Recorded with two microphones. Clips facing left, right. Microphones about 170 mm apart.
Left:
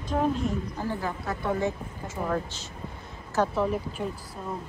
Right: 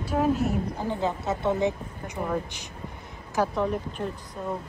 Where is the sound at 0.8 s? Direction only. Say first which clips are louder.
Right 3 dB; 20° right (ahead or behind).